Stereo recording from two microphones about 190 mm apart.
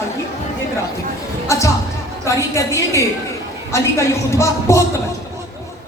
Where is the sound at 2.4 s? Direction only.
15° left (ahead or behind).